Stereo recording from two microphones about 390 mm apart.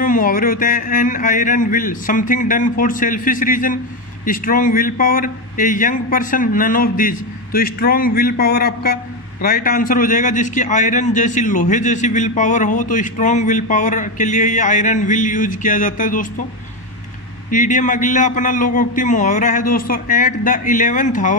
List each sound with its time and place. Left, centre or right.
0.0 s a man's voice: left
17.5 s a man's voice: centre